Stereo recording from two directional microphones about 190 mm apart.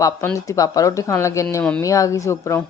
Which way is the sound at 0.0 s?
15° left (ahead or behind).